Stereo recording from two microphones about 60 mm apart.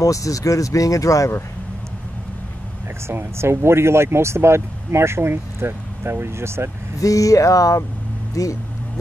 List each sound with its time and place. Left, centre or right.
0.0 s speech: left
3.1 s speech: right
7.0 s speech: left